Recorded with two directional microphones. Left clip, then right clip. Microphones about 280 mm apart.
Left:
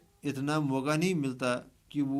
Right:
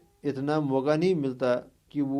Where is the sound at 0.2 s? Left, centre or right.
Left.